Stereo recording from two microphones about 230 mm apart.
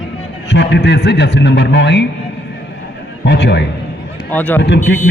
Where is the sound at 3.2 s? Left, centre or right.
Left.